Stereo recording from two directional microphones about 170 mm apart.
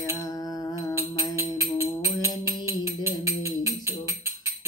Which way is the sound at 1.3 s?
15° right (ahead or behind).